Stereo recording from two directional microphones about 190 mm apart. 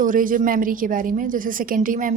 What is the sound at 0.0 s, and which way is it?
A woman's voice, 45° right (ahead or behind).